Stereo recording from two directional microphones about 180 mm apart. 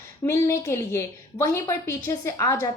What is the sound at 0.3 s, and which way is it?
A woman's voice, 15° left (ahead or behind).